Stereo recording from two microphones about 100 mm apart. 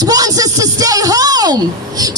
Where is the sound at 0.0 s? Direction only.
40° right (ahead or behind).